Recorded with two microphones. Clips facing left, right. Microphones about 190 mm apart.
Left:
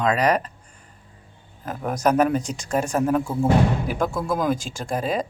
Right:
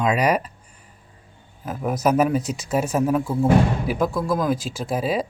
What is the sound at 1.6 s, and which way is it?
Speech, 5° right (ahead or behind).